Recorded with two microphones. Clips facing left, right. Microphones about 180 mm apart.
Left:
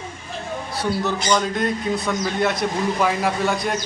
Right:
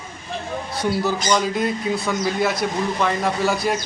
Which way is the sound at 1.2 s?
5° right (ahead or behind).